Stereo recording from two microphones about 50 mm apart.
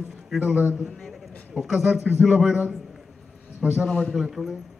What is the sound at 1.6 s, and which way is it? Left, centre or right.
Speech, centre.